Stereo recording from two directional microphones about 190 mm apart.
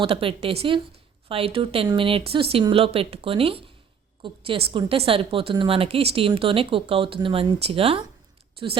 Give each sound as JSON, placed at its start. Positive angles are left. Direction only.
{"t": 0.0, "sound": "a woman's voice", "side_deg": -30}